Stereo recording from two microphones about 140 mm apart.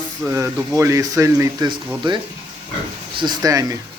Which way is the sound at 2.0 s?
35° right (ahead or behind).